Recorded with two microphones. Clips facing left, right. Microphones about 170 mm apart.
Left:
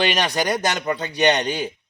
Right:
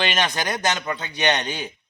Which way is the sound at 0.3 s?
10° left (ahead or behind).